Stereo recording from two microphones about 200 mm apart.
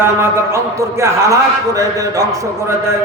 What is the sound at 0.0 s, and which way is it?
A man's voice, 15° right (ahead or behind).